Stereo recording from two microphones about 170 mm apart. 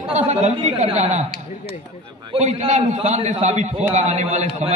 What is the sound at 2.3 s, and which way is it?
A man's voice, 40° right (ahead or behind).